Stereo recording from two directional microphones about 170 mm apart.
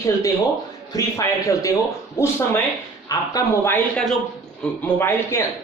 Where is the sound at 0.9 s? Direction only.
20° left (ahead or behind).